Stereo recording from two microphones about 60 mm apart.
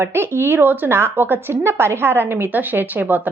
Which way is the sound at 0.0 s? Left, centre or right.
Right.